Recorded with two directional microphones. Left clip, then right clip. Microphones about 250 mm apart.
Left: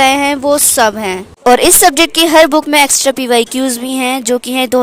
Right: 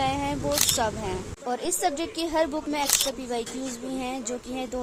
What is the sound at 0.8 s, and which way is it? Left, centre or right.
Speech, left.